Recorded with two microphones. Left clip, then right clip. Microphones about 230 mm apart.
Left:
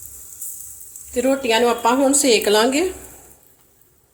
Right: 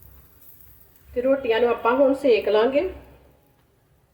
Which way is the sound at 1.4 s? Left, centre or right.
Left.